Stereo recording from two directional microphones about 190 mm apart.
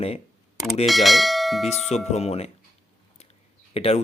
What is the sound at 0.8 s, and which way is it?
Bell, centre (ahead or behind).